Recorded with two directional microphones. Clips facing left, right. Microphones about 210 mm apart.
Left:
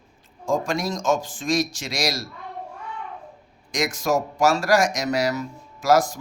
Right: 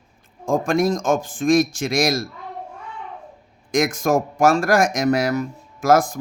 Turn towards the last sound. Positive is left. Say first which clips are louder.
# right 2 dB
turn(degrees=-55)  # may be behind; listen again after turning